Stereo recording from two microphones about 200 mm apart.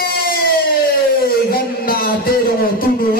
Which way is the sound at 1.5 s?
50° left (ahead or behind).